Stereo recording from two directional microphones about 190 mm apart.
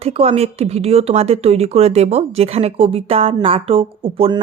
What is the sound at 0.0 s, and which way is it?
A woman's voice, 30° right (ahead or behind).